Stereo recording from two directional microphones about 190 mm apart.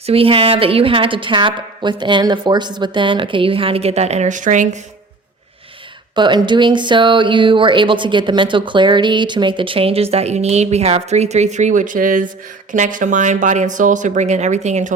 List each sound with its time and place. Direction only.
0.0 s speech: 30° right (ahead or behind)
6.1 s speech: 25° right (ahead or behind)